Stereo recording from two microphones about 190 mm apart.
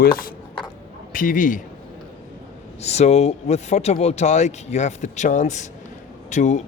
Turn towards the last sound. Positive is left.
turn(degrees=40)  # may be behind; listen again after turning